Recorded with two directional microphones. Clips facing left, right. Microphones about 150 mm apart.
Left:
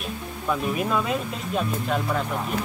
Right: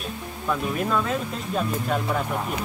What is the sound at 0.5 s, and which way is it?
Speech, 10° left (ahead or behind).